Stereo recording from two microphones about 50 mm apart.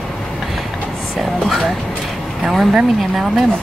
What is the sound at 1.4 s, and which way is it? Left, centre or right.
Speech, centre.